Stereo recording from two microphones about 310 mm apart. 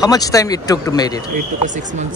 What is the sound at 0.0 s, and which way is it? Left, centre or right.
Speech, centre.